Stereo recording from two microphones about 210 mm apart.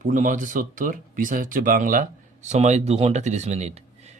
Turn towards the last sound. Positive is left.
turn(degrees=-30)  # may be behind; listen again after turning